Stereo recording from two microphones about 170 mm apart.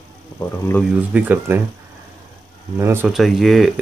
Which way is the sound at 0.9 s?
10° right (ahead or behind).